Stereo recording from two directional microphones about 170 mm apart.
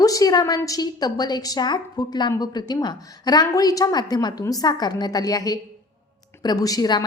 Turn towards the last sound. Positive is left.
turn(degrees=25)  # may be behind; listen again after turning